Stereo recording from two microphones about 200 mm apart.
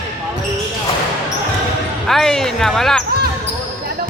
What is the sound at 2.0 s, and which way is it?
Speech, centre (ahead or behind).